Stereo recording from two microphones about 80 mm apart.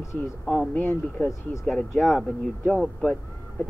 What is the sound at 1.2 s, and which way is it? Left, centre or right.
Speech, left.